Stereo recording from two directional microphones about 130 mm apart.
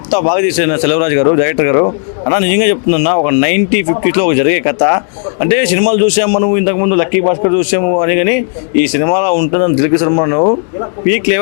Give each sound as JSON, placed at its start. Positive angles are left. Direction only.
{"t": 0.1, "sound": "speech", "side_deg": 15}